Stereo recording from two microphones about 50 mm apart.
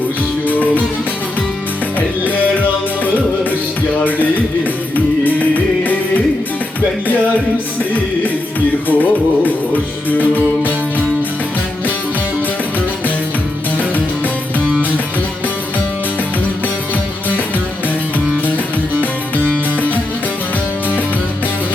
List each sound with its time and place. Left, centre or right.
0.4 s music: left
2.0 s music: left
4.9 s music: left
8.9 s music: left
19.4 s music: left